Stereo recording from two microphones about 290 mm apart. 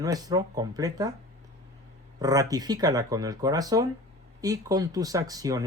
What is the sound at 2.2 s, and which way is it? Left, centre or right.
Speech, centre.